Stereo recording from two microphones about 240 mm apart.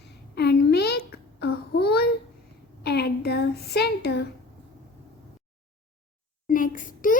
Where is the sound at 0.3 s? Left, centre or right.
Left.